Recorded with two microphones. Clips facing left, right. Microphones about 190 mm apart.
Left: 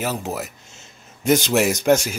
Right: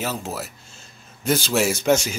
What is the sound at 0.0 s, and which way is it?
Speech, 15° left (ahead or behind).